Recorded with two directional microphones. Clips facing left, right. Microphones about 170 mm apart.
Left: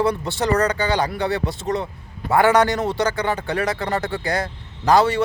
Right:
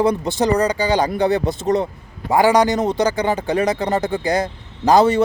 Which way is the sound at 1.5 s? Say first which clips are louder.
Right 6 dB; 45° right (ahead or behind).